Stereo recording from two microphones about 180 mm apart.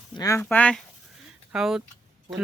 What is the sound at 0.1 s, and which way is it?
Speech, 20° left (ahead or behind).